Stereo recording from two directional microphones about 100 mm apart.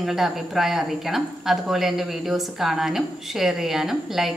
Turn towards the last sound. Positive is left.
turn(degrees=-5)  # may be behind; listen again after turning